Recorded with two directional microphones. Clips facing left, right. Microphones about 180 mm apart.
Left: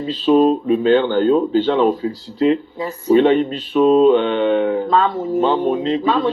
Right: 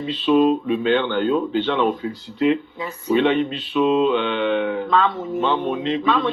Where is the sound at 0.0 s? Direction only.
40° left (ahead or behind).